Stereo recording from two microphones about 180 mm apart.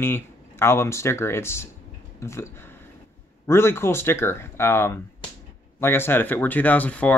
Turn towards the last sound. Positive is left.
turn(degrees=10)  # may be behind; listen again after turning